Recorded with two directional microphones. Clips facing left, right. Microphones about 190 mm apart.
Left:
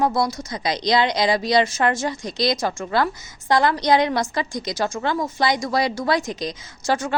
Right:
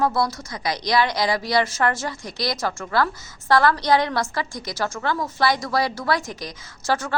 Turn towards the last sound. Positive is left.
turn(degrees=15)  # may be behind; listen again after turning